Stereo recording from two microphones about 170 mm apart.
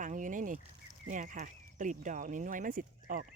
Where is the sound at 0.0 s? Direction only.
50° right (ahead or behind).